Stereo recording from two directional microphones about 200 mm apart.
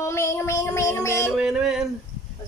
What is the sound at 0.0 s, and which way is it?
Music, 15° left (ahead or behind).